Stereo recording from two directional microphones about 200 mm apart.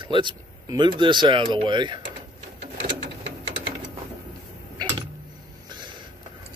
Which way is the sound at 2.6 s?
55° right (ahead or behind).